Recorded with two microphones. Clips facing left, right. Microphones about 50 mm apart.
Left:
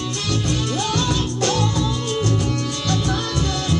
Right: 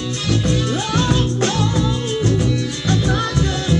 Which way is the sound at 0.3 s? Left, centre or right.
Right.